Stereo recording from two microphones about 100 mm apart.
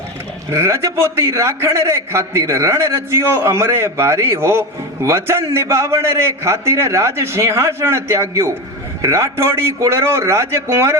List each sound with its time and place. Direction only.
0.5 s a man's voice: 30° right (ahead or behind)